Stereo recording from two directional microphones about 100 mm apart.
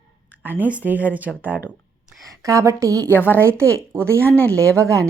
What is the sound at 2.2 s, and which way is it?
Speech, 35° right (ahead or behind).